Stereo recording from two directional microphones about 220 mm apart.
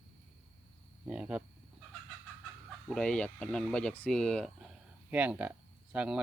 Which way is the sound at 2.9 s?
5° left (ahead or behind).